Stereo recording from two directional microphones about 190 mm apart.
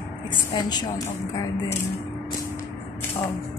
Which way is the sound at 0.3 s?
20° left (ahead or behind).